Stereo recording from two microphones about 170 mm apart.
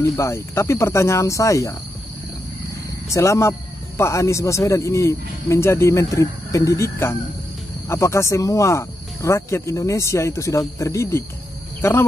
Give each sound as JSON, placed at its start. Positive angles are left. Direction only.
{"t": 0.0, "sound": "speech", "side_deg": 15}
{"t": 3.1, "sound": "speech", "side_deg": 15}